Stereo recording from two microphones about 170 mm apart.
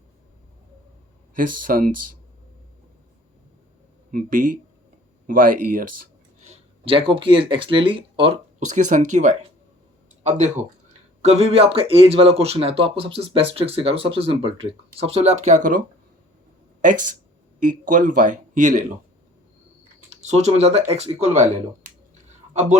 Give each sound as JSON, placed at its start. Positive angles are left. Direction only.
{"t": 1.4, "sound": "speech", "side_deg": -55}
{"t": 4.1, "sound": "speech", "side_deg": -55}
{"t": 6.5, "sound": "speech", "side_deg": -30}
{"t": 8.5, "sound": "speech", "side_deg": -45}
{"t": 17.6, "sound": "speech", "side_deg": -50}
{"t": 20.2, "sound": "speech", "side_deg": -40}